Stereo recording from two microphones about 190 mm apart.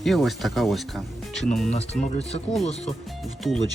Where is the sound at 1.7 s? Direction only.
35° left (ahead or behind).